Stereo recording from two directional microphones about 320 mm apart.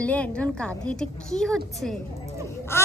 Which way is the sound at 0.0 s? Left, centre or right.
Centre.